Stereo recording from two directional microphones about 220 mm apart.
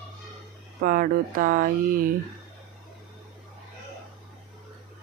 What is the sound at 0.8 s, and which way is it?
Speech, 40° right (ahead or behind).